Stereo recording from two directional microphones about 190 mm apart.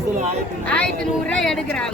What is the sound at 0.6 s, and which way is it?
Speech, 5° left (ahead or behind).